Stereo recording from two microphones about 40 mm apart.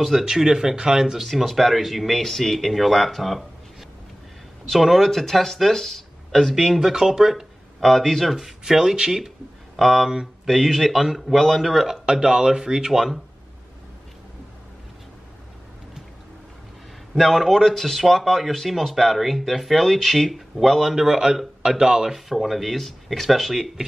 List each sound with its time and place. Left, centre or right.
0.2 s speech: centre
1.2 s speech: centre
4.7 s speech: centre
6.5 s speech: centre
7.8 s speech: centre
9.8 s speech: centre
12.1 s speech: centre
17.2 s speech: centre
20.8 s speech: centre
22.3 s speech: centre